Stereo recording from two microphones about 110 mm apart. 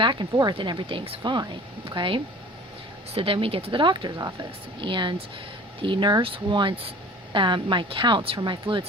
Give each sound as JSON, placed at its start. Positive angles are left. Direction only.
{"t": 0.0, "sound": "speech", "side_deg": -45}
{"t": 1.2, "sound": "speech", "side_deg": -45}